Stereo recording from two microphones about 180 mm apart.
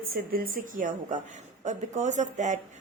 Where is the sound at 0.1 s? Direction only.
55° right (ahead or behind).